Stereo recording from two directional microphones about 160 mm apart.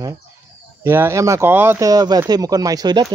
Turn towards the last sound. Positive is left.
turn(degrees=-25)  # may be behind; listen again after turning